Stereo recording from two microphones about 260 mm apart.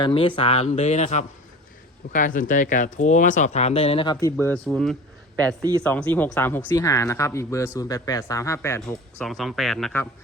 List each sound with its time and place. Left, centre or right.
0.0 s speech: centre
5.5 s speech: centre
5.8 s speech: centre